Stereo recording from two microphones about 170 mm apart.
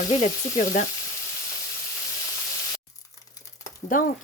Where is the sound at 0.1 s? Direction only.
45° left (ahead or behind).